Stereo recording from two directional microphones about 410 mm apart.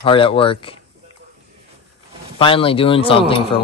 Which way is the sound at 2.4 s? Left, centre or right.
Centre.